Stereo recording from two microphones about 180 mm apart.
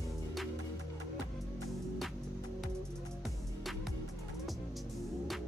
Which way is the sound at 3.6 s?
Centre (ahead or behind).